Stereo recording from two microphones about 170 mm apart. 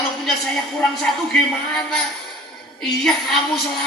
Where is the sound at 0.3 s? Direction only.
Centre (ahead or behind).